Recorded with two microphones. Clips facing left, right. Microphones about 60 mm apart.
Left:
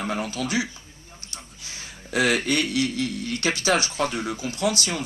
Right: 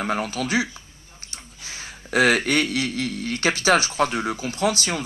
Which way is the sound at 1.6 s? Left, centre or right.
Right.